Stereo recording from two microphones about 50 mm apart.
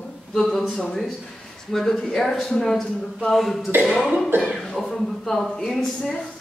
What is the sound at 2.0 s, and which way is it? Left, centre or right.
A man's voice, centre.